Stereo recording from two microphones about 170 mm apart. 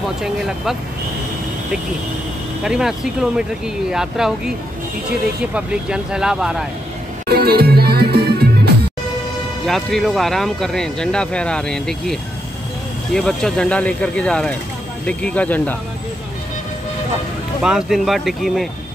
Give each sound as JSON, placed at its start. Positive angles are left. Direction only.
{"t": 0.2, "sound": "speech", "side_deg": -5}
{"t": 2.6, "sound": "speech", "side_deg": -5}
{"t": 5.5, "sound": "speech", "side_deg": -5}
{"t": 7.2, "sound": "music", "side_deg": -65}
{"t": 9.7, "sound": "speech", "side_deg": 0}
{"t": 17.6, "sound": "speech", "side_deg": -5}